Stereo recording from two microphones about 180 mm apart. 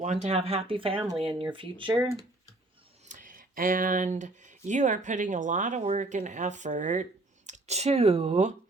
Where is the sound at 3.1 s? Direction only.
50° right (ahead or behind).